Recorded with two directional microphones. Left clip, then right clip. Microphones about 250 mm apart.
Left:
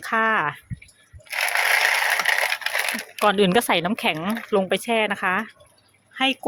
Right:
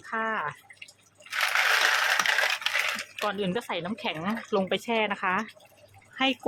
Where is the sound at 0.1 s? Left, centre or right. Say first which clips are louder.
Left 9 dB; left.